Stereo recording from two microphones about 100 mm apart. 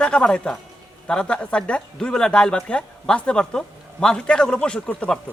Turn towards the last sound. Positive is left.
turn(degrees=10)  # may be behind; listen again after turning